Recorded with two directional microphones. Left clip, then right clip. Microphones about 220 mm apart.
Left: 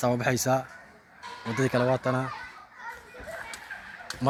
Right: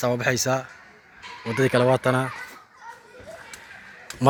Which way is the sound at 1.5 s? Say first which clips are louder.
Right 6 dB; 25° right (ahead or behind).